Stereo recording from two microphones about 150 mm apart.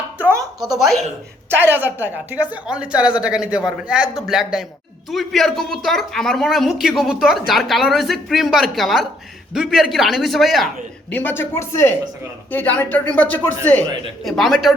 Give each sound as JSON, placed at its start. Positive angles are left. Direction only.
{"t": 0.2, "sound": "a sound", "side_deg": -20}
{"t": 1.5, "sound": "a woman's voice", "side_deg": -15}
{"t": 11.1, "sound": "speech", "side_deg": 10}
{"t": 14.3, "sound": "speech", "side_deg": 0}